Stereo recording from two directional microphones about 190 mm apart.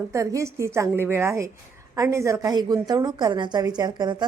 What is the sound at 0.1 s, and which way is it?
A woman's voice, 15° right (ahead or behind).